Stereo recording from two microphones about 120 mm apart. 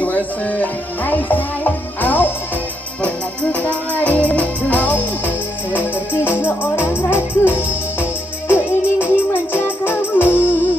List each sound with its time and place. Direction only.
0.0 s music: 15° left (ahead or behind)
3.5 s music: 15° left (ahead or behind)